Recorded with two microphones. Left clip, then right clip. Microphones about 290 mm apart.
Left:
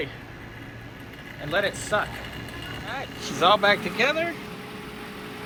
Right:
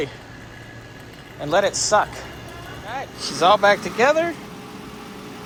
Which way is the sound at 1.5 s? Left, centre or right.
Centre.